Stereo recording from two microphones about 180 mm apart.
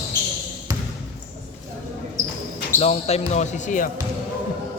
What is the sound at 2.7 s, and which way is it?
Speech, 35° left (ahead or behind).